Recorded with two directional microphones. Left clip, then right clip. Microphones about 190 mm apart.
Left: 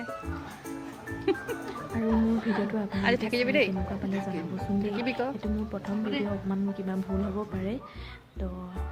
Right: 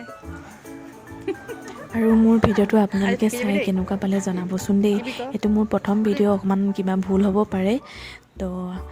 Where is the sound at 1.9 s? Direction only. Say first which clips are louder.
Right 10 dB; 55° right (ahead or behind).